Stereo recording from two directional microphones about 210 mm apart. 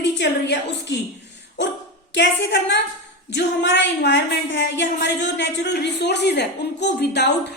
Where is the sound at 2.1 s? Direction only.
55° left (ahead or behind).